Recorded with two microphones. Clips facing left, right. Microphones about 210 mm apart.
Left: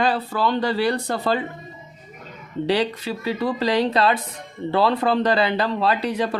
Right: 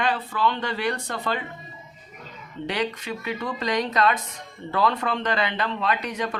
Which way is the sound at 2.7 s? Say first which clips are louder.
Left 6 dB; 35° left (ahead or behind).